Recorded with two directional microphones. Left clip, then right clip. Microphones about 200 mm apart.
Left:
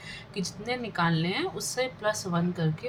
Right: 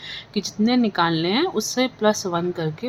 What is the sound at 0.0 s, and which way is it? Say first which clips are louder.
A woman's voice: right 8 dB; 50° right (ahead or behind).